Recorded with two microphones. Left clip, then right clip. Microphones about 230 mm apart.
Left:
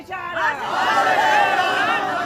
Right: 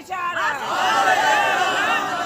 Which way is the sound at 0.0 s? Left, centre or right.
Right.